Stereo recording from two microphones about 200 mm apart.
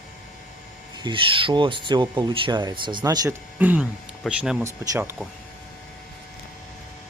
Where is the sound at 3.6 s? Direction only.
5° right (ahead or behind).